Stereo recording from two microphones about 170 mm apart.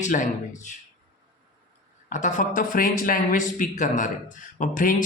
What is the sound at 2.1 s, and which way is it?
Speech, 45° left (ahead or behind).